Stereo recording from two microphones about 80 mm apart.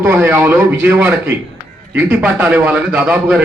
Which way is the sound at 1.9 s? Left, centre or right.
Centre.